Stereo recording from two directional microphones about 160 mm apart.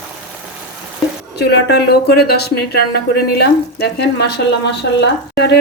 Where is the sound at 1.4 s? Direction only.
90° left.